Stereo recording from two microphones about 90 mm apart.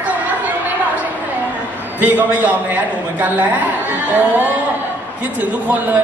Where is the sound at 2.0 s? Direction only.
20° right (ahead or behind).